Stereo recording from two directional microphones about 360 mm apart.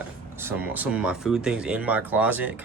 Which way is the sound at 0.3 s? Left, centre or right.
Centre.